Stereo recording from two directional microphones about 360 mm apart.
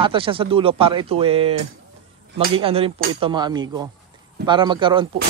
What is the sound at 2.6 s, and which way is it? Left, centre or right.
Speech, centre.